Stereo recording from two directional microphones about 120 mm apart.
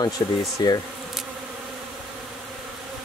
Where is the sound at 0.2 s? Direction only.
40° left (ahead or behind).